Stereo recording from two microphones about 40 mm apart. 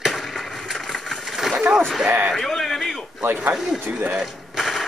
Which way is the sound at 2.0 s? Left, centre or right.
Right.